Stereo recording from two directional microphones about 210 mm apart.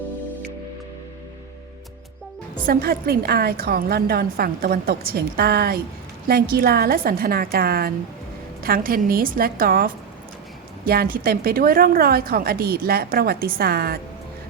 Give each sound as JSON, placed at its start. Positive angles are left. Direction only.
{"t": 2.6, "sound": "a woman's voice", "side_deg": -45}